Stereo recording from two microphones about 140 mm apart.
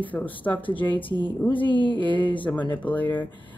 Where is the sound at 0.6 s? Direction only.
35° left (ahead or behind).